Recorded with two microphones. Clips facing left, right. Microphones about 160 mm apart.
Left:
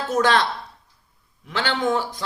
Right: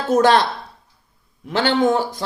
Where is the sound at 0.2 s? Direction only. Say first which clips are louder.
Right 4 dB; 40° right (ahead or behind).